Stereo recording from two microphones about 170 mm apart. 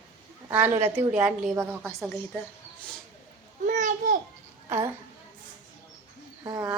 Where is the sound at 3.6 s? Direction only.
50° right (ahead or behind).